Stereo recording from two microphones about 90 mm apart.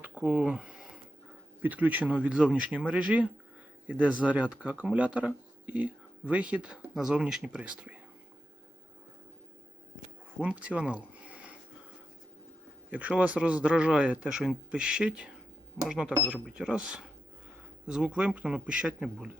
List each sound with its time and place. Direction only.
0.0 s a sound: 20° right (ahead or behind)
1.6 s speech: 20° right (ahead or behind)
10.4 s speech: 15° right (ahead or behind)
12.9 s speech: 15° right (ahead or behind)